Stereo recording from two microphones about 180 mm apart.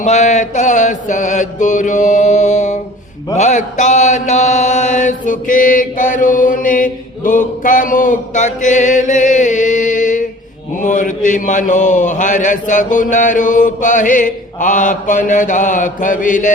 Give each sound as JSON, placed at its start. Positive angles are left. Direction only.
{"t": 0.0, "sound": "a man's voice", "side_deg": 40}
{"t": 3.3, "sound": "mantra", "side_deg": 40}
{"t": 10.8, "sound": "a man's voice", "side_deg": 45}